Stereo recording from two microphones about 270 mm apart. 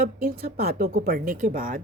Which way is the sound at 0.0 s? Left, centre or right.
Right.